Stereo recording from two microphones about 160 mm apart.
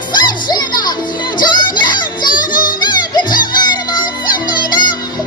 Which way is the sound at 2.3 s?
60° left (ahead or behind).